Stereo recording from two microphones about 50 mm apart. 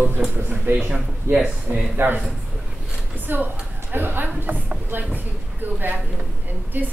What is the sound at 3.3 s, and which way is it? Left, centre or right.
A man's voice, right.